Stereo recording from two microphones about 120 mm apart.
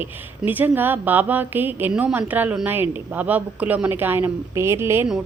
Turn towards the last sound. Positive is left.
turn(degrees=-20)  # may be behind; listen again after turning